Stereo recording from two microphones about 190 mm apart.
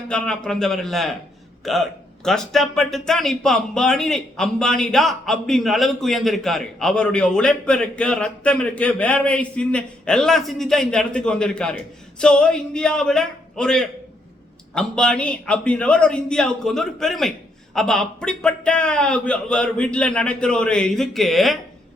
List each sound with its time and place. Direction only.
0.1 s speech: 5° left (ahead or behind)